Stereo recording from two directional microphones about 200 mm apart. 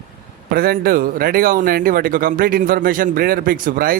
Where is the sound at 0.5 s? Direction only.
50° right (ahead or behind).